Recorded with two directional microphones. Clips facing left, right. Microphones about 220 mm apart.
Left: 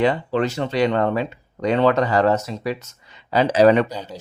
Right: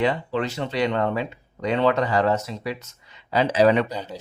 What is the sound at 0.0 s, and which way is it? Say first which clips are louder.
Speech: left 4 dB; 40° left (ahead or behind).